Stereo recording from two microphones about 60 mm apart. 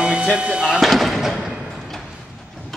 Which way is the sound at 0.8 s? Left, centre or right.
Centre.